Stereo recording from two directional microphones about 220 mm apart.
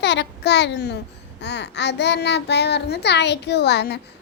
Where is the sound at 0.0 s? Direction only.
50° left (ahead or behind).